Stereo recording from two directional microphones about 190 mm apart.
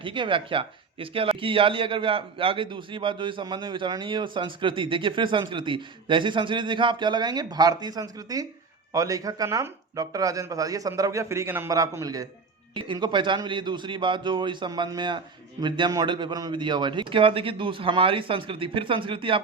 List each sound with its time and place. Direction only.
0.0 s a man's voice: 25° right (ahead or behind)